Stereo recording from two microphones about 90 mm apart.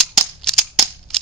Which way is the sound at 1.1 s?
5° left (ahead or behind).